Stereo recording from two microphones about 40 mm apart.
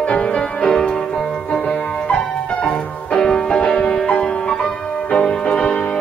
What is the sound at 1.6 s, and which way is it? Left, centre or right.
Music, left.